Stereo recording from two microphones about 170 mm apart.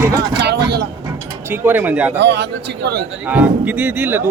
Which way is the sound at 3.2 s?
10° right (ahead or behind).